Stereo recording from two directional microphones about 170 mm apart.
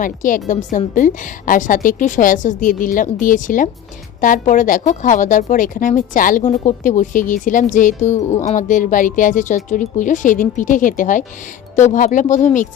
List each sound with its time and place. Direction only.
0.0 s speech: 50° left (ahead or behind)